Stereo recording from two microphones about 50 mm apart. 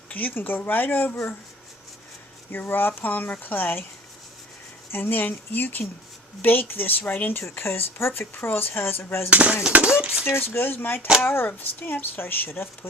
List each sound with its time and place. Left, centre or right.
0.1 s speech: left
2.5 s speech: left
4.9 s speech: left
7.6 s speech: left
9.3 s speech: right
10.2 s speech: left